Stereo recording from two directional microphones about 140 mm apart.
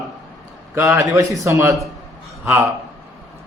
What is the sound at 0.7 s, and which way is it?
A man's voice, 20° right (ahead or behind).